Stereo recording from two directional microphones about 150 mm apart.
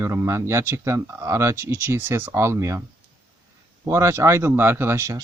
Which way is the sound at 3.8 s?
20° right (ahead or behind).